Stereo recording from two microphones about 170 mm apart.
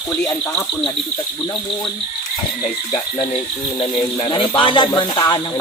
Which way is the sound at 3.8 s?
35° left (ahead or behind).